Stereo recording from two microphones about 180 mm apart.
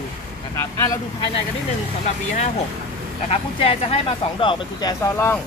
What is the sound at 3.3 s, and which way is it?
Speech, 35° left (ahead or behind).